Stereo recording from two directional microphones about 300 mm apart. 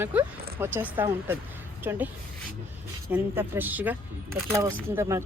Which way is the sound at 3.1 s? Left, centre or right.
Centre.